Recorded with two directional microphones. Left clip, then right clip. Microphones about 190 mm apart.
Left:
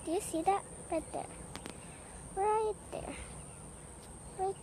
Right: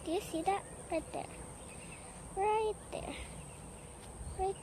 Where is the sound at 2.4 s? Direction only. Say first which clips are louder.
Left 1 dB; 10° left (ahead or behind).